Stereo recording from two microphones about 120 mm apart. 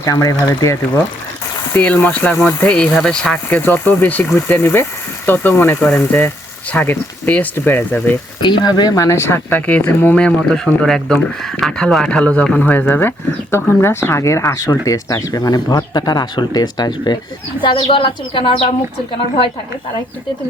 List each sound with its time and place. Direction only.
0.0 s speech: 30° left (ahead or behind)
1.7 s speech: 10° left (ahead or behind)
8.4 s speech: 40° left (ahead or behind)
17.7 s a woman's voice: 55° left (ahead or behind)